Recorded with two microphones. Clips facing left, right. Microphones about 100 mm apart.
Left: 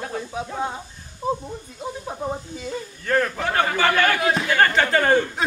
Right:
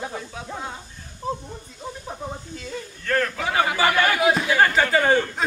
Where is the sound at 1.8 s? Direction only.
15° left (ahead or behind).